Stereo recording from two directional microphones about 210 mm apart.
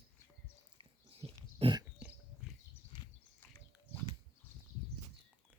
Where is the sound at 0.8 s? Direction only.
25° right (ahead or behind).